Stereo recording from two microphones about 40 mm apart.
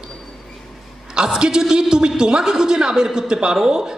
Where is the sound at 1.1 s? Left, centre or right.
Centre.